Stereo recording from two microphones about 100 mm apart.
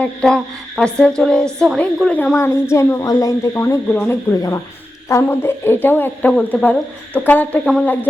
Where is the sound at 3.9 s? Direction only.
15° left (ahead or behind).